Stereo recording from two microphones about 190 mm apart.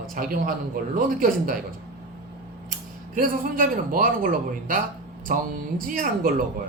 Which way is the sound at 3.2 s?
45° right (ahead or behind).